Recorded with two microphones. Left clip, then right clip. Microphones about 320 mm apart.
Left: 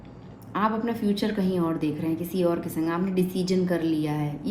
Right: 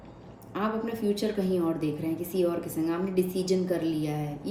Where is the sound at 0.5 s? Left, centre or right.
Left.